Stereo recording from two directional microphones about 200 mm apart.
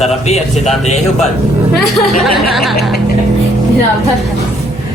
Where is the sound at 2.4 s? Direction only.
Centre (ahead or behind).